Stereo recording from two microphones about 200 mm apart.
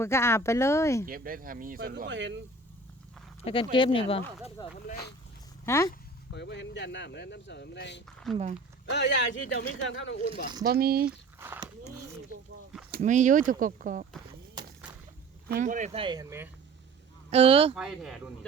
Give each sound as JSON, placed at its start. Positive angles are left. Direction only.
{"t": 0.0, "sound": "speech", "side_deg": 15}
{"t": 1.0, "sound": "speech", "side_deg": -45}
{"t": 2.0, "sound": "speech", "side_deg": -65}
{"t": 3.4, "sound": "speech", "side_deg": 25}
{"t": 6.3, "sound": "speech", "side_deg": 60}
{"t": 8.3, "sound": "speech", "side_deg": 0}
{"t": 8.9, "sound": "speech", "side_deg": 60}
{"t": 10.7, "sound": "speech", "side_deg": -50}
{"t": 11.3, "sound": "speech", "side_deg": -10}
{"t": 13.0, "sound": "speech", "side_deg": -40}
{"t": 15.4, "sound": "speech", "side_deg": -40}
{"t": 17.3, "sound": "speech", "side_deg": -30}
{"t": 17.7, "sound": "speech", "side_deg": 0}